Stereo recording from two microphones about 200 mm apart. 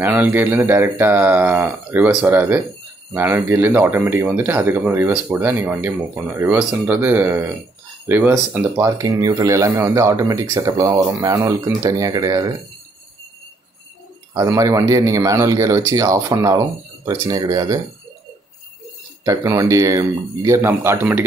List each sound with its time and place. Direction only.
0.0 s speech: 10° right (ahead or behind)
14.3 s speech: 15° right (ahead or behind)
19.2 s speech: 15° right (ahead or behind)